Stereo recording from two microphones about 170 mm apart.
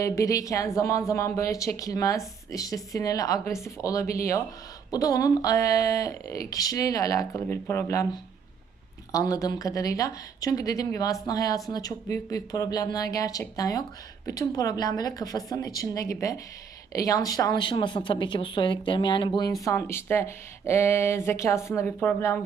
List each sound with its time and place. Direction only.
0.0 s speech: 20° left (ahead or behind)
19.6 s speech: 15° left (ahead or behind)